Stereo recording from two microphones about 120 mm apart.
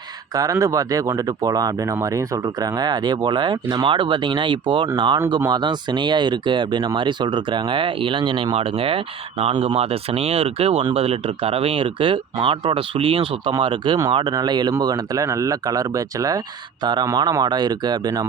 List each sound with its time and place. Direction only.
0.3 s speech: 25° right (ahead or behind)